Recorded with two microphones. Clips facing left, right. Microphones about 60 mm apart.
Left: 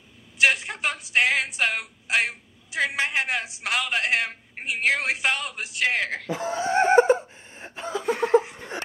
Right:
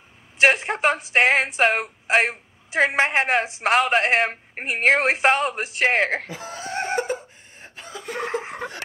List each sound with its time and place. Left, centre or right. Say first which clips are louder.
0.4 s a woman's voice: right 4 dB; right
6.3 s laughter: left 7 dB; left
8.2 s laughter: left 7 dB; right